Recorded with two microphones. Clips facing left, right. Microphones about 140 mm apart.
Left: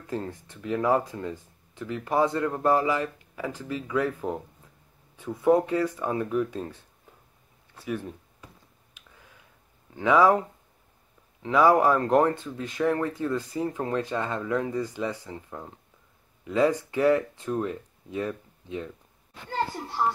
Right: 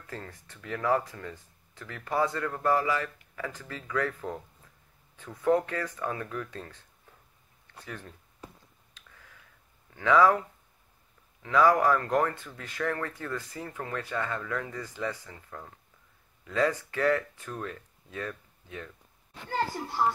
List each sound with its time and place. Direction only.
0.0 s speech: 15° left (ahead or behind)
7.8 s speech: 15° left (ahead or behind)
8.9 s a sound: 15° left (ahead or behind)
9.9 s speech: 20° left (ahead or behind)
11.5 s speech: 20° left (ahead or behind)